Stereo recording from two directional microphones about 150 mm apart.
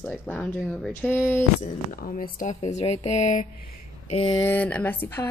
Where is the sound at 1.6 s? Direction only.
65° left (ahead or behind).